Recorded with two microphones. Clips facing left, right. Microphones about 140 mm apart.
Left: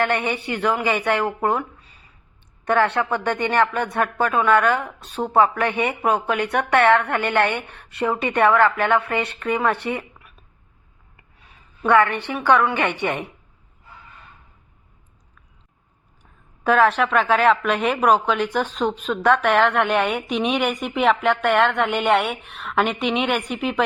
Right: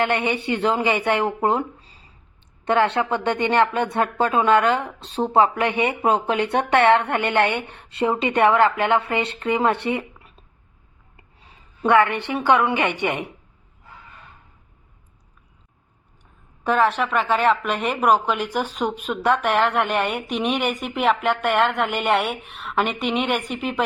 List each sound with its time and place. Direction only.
0.0 s a woman's voice: 20° right (ahead or behind)
16.6 s a woman's voice: centre (ahead or behind)